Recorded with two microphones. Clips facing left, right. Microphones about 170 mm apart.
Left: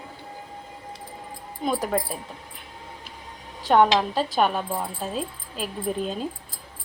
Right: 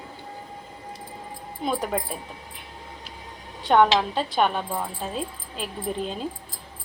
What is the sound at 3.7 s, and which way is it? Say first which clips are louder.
Speech: even; 5° left (ahead or behind).